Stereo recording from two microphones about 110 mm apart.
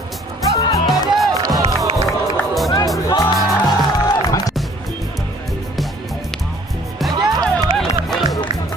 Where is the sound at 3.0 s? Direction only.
35° left (ahead or behind).